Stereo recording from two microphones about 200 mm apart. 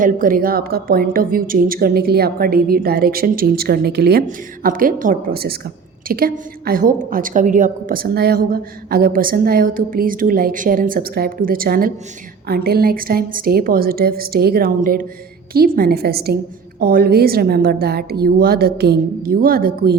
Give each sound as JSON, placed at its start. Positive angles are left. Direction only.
{"t": 0.0, "sound": "a woman's voice", "side_deg": -45}